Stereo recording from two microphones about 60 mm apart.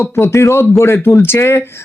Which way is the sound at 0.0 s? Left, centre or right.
Left.